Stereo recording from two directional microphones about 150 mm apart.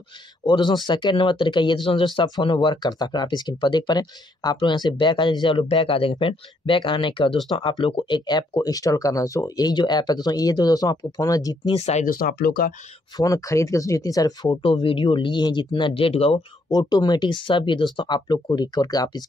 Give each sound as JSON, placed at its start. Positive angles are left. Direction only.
{"t": 0.5, "sound": "speech", "side_deg": 30}
{"t": 11.7, "sound": "speech", "side_deg": 45}
{"t": 12.1, "sound": "speech", "side_deg": 75}
{"t": 13.2, "sound": "speech", "side_deg": 20}
{"t": 14.6, "sound": "speech", "side_deg": 35}
{"t": 16.6, "sound": "speech", "side_deg": 25}